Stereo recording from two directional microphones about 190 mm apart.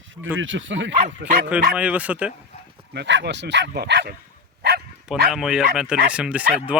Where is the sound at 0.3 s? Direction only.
90° right.